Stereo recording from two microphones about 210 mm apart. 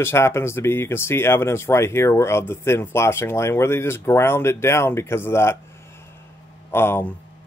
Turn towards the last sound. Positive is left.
turn(degrees=10)  # may be behind; listen again after turning